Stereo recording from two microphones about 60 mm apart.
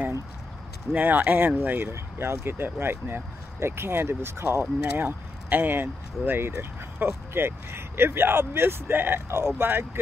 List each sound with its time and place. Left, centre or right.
0.9 s speech: right
1.9 s speech: right